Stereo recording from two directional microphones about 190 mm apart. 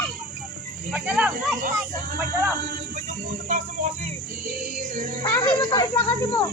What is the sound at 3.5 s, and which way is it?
Speech, 40° right (ahead or behind).